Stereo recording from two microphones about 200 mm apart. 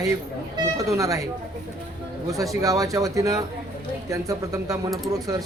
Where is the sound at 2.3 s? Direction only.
15° right (ahead or behind).